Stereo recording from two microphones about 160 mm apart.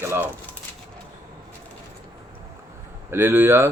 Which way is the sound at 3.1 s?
15° right (ahead or behind).